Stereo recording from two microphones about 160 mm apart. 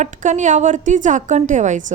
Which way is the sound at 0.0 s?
50° right (ahead or behind).